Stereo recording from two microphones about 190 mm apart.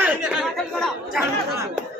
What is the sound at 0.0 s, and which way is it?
Chatter, 5° right (ahead or behind).